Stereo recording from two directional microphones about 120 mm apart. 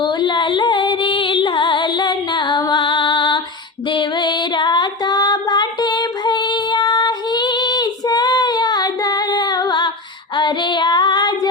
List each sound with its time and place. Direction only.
0.0 s music: 40° left (ahead or behind)
10.3 s female singing: 40° left (ahead or behind)